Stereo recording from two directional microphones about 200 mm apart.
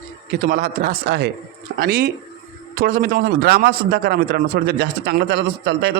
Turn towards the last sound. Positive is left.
turn(degrees=-60)  # may be behind; listen again after turning